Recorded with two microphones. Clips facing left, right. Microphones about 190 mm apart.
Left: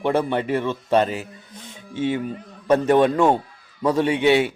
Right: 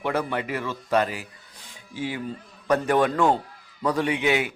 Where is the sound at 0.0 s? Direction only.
25° left (ahead or behind).